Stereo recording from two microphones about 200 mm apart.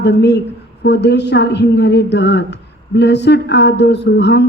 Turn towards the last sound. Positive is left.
turn(degrees=60)  # may be behind; listen again after turning